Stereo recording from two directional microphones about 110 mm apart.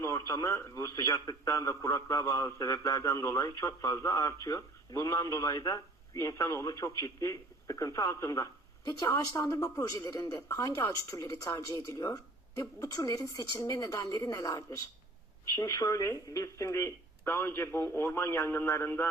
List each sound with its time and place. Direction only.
0.0 s speech: 30° left (ahead or behind)